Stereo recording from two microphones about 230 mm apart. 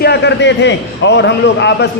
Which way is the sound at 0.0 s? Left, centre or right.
Left.